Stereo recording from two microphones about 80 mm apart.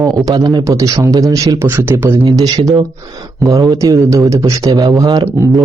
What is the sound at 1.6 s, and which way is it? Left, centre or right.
Speech, right.